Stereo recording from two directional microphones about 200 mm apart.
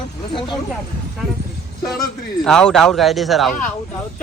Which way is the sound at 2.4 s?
5° left (ahead or behind).